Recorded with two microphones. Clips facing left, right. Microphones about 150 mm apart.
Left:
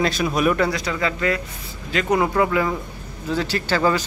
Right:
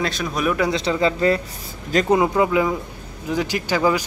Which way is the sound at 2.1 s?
20° right (ahead or behind).